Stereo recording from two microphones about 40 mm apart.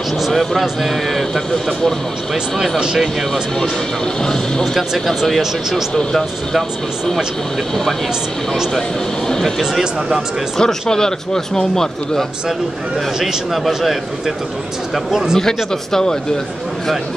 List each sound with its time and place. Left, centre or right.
0.3 s speech: centre
2.5 s speech: centre
4.2 s speech: centre
4.7 s speech: centre
5.4 s speech: centre
5.9 s speech: centre
9.6 s speech: centre
10.6 s speech: centre
13.2 s speech: centre
15.3 s speech: centre